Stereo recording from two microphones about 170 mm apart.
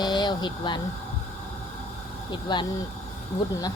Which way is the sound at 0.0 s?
25° left (ahead or behind).